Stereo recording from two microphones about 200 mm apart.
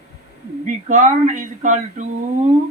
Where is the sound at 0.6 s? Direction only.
40° right (ahead or behind).